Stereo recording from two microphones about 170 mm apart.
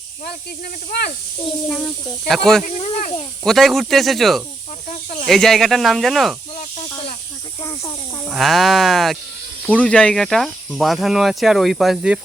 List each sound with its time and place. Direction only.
1.5 s speech: 5° left (ahead or behind)
2.6 s speech: 45° left (ahead or behind)
3.4 s speech: centre (ahead or behind)
8.3 s speech: centre (ahead or behind)